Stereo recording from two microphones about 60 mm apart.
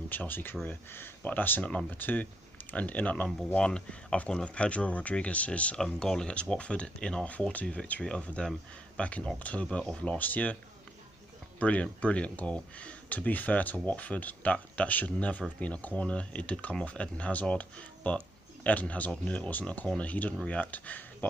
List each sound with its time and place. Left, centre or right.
0.1 s speech: left
3.4 s speech: centre
5.8 s speech: centre; by 10.6 s left
11.6 s speech: left